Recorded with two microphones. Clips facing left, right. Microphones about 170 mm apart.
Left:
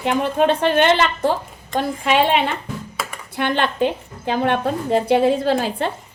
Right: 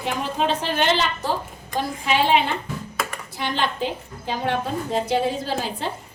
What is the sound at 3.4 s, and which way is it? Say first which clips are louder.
A woman's voice: left 6 dB; 60° left (ahead or behind).